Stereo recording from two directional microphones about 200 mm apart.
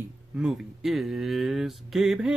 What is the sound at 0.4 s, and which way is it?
Speech, centre (ahead or behind).